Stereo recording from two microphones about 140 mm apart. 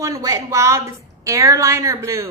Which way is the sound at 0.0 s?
20° right (ahead or behind).